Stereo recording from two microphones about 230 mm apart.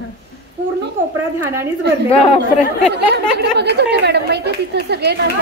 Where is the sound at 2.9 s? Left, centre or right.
Right.